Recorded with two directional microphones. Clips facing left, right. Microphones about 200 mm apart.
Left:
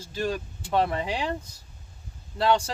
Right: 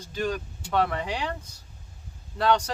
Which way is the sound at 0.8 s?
25° left (ahead or behind).